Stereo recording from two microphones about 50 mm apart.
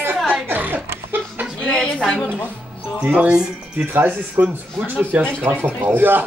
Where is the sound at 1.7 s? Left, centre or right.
Centre.